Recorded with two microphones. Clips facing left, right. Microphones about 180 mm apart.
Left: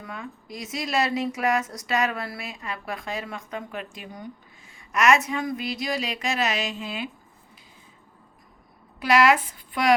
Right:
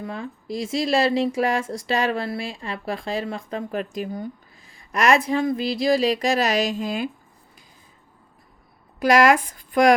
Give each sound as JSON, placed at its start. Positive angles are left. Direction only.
{"t": 0.0, "sound": "speech", "side_deg": -30}
{"t": 9.0, "sound": "a woman's voice", "side_deg": -45}